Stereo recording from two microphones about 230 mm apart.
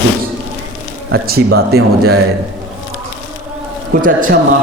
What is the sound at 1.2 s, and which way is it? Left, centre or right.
Speech, right.